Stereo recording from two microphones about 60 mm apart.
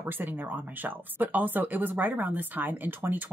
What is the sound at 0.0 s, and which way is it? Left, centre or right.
Speech, right.